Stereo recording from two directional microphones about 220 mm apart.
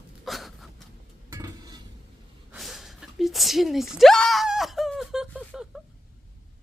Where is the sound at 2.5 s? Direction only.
Centre (ahead or behind).